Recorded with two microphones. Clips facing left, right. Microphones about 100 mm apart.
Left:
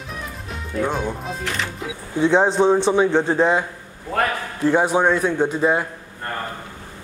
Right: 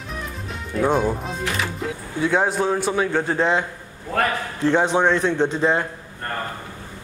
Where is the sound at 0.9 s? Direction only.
Centre (ahead or behind).